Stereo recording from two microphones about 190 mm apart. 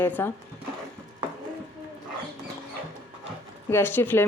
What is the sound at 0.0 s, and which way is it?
Speech, 10° left (ahead or behind).